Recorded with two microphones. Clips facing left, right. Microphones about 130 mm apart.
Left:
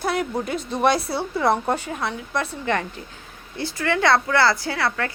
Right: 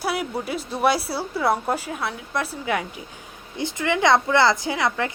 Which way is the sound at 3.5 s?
15° right (ahead or behind).